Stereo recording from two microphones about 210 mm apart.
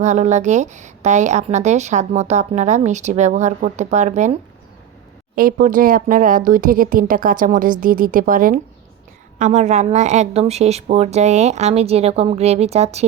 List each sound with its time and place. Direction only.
0.0 s a woman's voice: 35° right (ahead or behind)